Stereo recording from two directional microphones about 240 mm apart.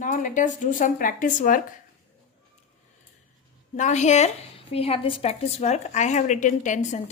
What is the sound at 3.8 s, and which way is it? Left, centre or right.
A woman's voice, left.